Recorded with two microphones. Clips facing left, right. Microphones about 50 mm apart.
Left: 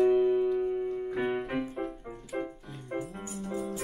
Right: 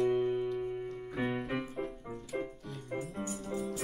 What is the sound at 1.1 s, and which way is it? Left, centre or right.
Keyboard, centre.